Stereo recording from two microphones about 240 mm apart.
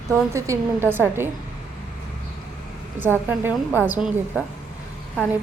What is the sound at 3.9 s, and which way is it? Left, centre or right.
Speech, centre.